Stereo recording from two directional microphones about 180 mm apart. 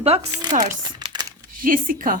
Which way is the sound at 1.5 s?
50° right (ahead or behind).